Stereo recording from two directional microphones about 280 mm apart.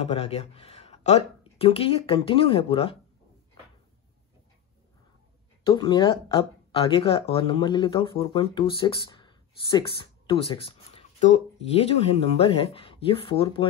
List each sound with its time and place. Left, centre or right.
0.0 s speech: left
5.6 s speech: centre